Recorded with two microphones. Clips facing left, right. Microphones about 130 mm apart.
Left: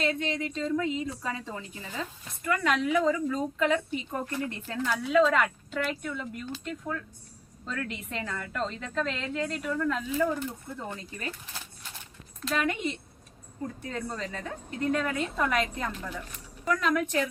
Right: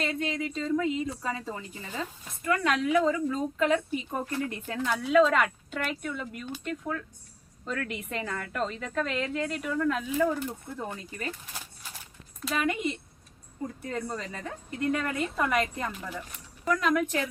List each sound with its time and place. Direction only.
0.2 s a woman's voice: 5° right (ahead or behind)
5.0 s a woman's voice: 5° right (ahead or behind)
12.4 s speech: 5° right (ahead or behind)